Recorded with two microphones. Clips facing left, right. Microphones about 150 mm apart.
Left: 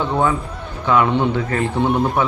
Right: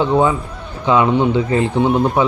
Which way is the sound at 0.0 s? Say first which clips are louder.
Right 4 dB; 15° right (ahead or behind).